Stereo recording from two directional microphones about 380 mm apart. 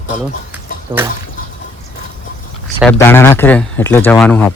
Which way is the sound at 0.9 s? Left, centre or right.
Centre.